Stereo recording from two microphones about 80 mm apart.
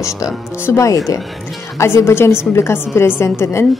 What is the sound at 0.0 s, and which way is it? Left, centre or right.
A woman's voice, left.